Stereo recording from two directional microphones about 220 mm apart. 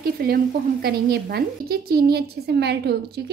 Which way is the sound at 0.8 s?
45° right (ahead or behind).